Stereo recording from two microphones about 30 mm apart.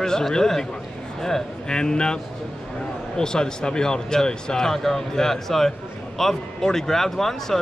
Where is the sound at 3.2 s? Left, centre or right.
Left.